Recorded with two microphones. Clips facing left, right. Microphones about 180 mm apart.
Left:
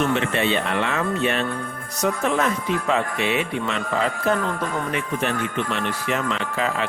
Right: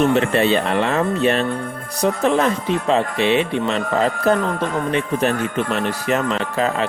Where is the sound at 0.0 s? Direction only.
35° right (ahead or behind).